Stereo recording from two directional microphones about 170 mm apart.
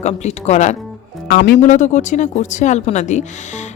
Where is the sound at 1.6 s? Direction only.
45° left (ahead or behind).